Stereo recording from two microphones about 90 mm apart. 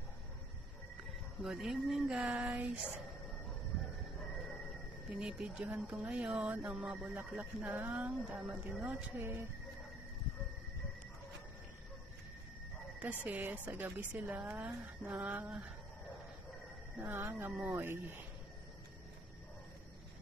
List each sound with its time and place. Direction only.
1.4 s speech: 5° right (ahead or behind)
2.3 s speech: 15° right (ahead or behind)
5.1 s speech: 10° right (ahead or behind)
8.2 s speech: 5° right (ahead or behind)
8.5 s speech: 15° right (ahead or behind)
13.0 s speech: 15° right (ahead or behind)
17.1 s speech: 25° right (ahead or behind)